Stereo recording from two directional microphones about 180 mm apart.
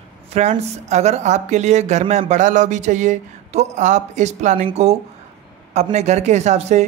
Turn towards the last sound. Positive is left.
turn(degrees=-40)  # may be behind; listen again after turning